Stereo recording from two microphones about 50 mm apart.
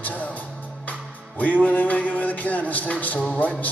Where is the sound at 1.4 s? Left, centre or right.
Left.